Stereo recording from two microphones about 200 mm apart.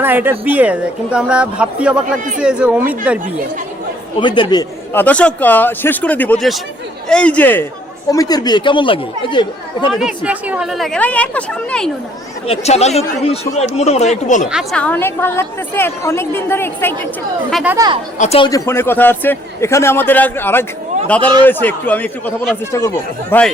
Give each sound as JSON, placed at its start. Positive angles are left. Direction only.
{"t": 0.0, "sound": "speech", "side_deg": -10}
{"t": 4.2, "sound": "speech", "side_deg": 25}
{"t": 4.9, "sound": "a woman's voice", "side_deg": 5}
{"t": 9.9, "sound": "speech", "side_deg": -5}
{"t": 12.5, "sound": "speech", "side_deg": 30}
{"t": 14.4, "sound": "a woman's voice", "side_deg": 0}
{"t": 17.5, "sound": "speech", "side_deg": -5}
{"t": 17.7, "sound": "speech", "side_deg": -20}
{"t": 18.2, "sound": "a woman's voice", "side_deg": 30}